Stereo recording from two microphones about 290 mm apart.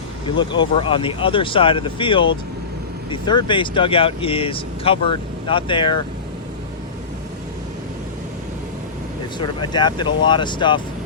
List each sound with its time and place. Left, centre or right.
0.3 s speech: centre
9.4 s speech: centre